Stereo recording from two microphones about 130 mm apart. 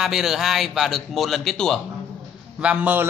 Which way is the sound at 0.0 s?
5° right (ahead or behind).